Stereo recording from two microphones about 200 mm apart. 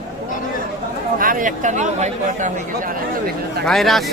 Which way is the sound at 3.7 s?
Centre (ahead or behind).